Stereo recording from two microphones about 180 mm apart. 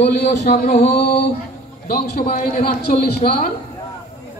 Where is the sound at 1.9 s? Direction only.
40° left (ahead or behind).